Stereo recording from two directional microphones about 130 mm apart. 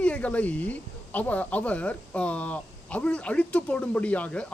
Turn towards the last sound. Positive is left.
turn(degrees=10)  # may be behind; listen again after turning